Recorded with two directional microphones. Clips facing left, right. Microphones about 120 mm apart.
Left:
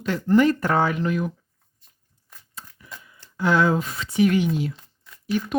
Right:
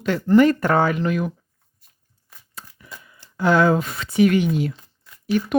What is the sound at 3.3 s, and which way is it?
Speech, 60° right (ahead or behind).